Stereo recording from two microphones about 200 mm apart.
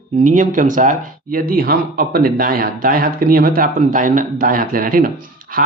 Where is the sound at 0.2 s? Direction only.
40° right (ahead or behind).